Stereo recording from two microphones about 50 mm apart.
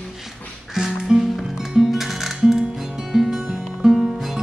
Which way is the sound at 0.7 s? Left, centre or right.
Centre.